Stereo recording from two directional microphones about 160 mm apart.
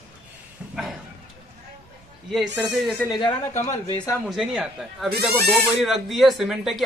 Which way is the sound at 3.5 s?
45° left (ahead or behind).